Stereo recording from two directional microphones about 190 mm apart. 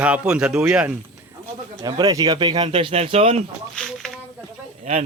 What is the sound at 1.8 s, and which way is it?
Speech, 20° right (ahead or behind).